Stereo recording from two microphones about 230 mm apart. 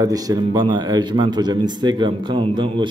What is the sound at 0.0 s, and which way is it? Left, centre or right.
A man's voice, centre.